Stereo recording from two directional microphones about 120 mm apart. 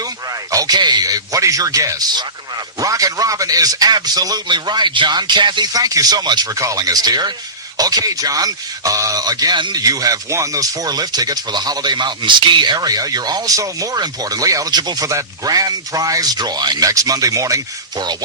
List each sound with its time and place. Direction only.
0.5 s speech: 30° right (ahead or behind)